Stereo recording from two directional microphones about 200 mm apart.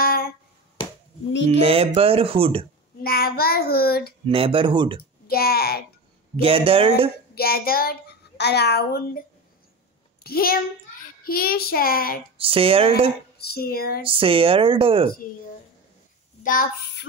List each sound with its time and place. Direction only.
0.0 s a sound: 50° left (ahead or behind)
1.3 s speech: 65° left (ahead or behind)
1.6 s speech: 30° right (ahead or behind)
3.0 s child singing: 50° left (ahead or behind)
4.3 s speech: 25° right (ahead or behind)
5.3 s child singing: 50° left (ahead or behind)
6.4 s speech: 25° right (ahead or behind)
7.3 s a child's voice: 50° left (ahead or behind)
10.2 s a child's voice: 50° left (ahead or behind)
11.2 s child singing: 50° left (ahead or behind)
12.4 s speech: 30° right (ahead or behind)
13.4 s child singing: 50° left (ahead or behind)
14.0 s speech: 25° right (ahead or behind)